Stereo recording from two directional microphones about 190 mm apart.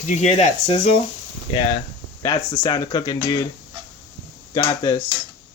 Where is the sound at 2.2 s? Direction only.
20° left (ahead or behind).